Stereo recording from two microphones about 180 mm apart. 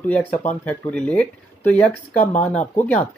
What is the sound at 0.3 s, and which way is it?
Speech, 40° left (ahead or behind).